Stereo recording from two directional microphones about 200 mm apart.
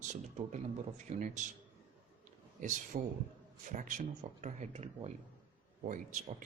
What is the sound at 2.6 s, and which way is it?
Speech, 40° right (ahead or behind).